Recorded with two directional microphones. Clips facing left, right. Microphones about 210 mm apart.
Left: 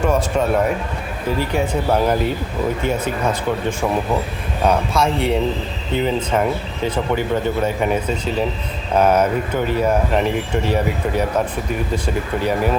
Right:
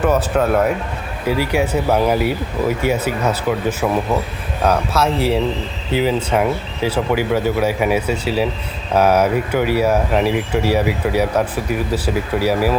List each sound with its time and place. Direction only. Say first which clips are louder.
0.0 s speech: right 2 dB; 5° right (ahead or behind)